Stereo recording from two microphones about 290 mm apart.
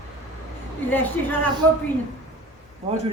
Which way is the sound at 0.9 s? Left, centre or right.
Centre.